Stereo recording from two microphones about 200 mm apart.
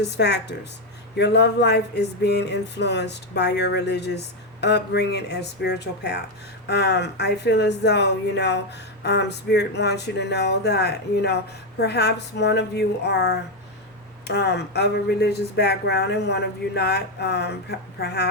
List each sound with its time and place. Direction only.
0.0 s speech: 55° left (ahead or behind)